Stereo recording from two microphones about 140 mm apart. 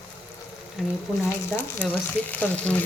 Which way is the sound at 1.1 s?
20° left (ahead or behind).